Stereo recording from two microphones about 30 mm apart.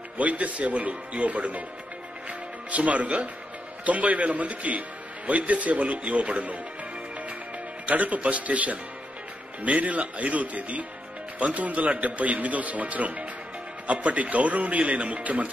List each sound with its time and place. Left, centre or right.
0.2 s speech: right
7.8 s speech: right